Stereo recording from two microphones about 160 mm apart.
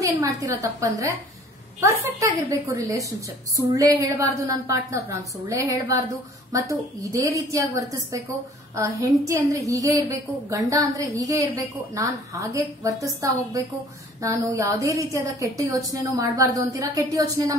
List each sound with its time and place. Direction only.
0.0 s a woman's voice: 20° right (ahead or behind)